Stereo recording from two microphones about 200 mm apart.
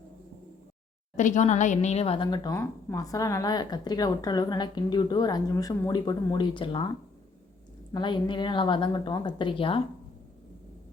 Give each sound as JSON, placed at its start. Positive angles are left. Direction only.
{"t": 1.1, "sound": "speech", "side_deg": 40}
{"t": 7.9, "sound": "speech", "side_deg": 25}